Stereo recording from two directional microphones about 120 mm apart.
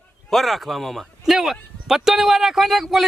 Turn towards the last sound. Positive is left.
turn(degrees=0)  # may be behind; listen again after turning